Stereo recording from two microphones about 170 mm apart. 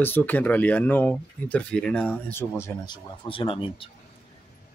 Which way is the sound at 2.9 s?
30° left (ahead or behind).